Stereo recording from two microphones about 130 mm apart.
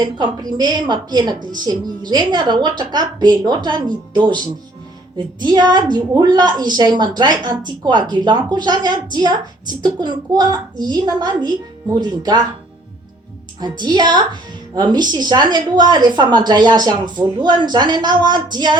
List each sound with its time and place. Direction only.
0.0 s a woman's voice: 35° right (ahead or behind)
13.6 s a woman's voice: 35° right (ahead or behind)